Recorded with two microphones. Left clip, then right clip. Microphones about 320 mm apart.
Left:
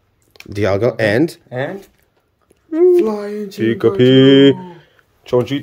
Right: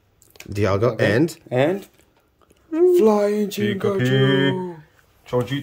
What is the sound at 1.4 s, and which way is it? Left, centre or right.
Speech, right.